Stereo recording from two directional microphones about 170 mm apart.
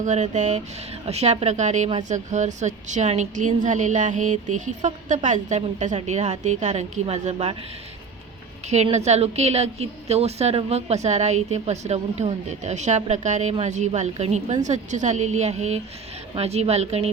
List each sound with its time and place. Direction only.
0.0 s speech: 45° right (ahead or behind)
8.7 s a woman's voice: 40° right (ahead or behind)